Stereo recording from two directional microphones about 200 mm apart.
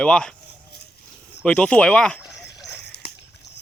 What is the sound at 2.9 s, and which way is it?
Dog, 55° left (ahead or behind).